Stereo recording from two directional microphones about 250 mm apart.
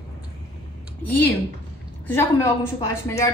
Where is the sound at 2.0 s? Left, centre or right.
Centre.